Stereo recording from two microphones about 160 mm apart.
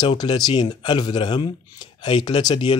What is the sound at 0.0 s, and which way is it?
Speech, 25° left (ahead or behind).